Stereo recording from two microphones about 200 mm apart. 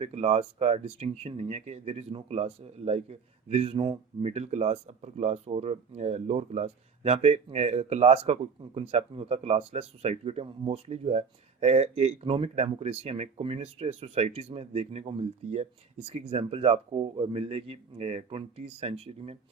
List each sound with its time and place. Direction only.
0.0 s a man's voice: 30° right (ahead or behind)